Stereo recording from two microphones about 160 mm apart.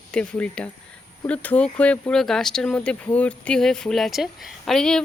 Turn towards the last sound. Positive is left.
turn(degrees=5)  # may be behind; listen again after turning